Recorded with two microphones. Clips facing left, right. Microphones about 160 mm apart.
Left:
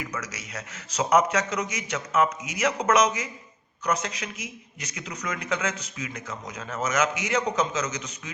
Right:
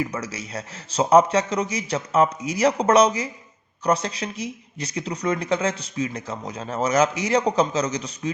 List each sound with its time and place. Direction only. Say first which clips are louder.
0.0 s speech: right 7 dB; 30° right (ahead or behind)